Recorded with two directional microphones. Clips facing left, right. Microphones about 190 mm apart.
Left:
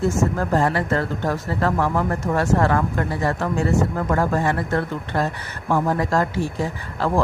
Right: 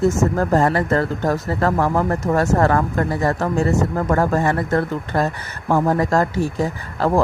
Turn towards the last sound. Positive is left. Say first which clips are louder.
# right 3 dB
turn(degrees=-45)  # may be behind; listen again after turning